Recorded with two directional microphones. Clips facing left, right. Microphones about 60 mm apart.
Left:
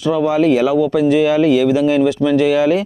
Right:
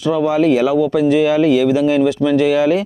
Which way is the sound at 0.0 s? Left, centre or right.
Left.